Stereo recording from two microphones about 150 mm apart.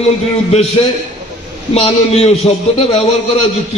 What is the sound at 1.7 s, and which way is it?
A man's voice, 45° left (ahead or behind).